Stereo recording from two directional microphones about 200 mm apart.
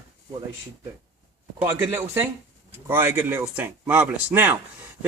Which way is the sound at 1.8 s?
15° right (ahead or behind).